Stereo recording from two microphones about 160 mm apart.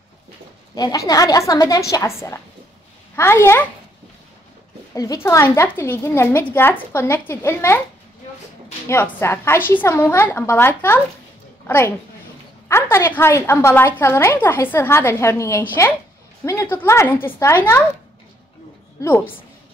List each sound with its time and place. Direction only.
0.7 s a woman's voice: 20° left (ahead or behind)
4.9 s a woman's voice: 20° left (ahead or behind)
8.8 s a woman's voice: 15° left (ahead or behind)
18.9 s a woman's voice: 15° left (ahead or behind)